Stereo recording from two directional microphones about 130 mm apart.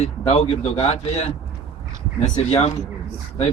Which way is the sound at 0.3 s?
50° left (ahead or behind).